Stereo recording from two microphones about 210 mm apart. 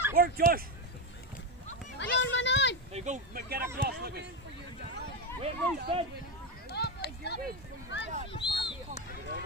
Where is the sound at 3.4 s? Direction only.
45° right (ahead or behind).